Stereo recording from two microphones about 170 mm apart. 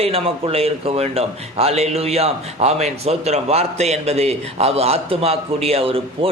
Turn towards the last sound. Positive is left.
turn(degrees=-35)  # may be behind; listen again after turning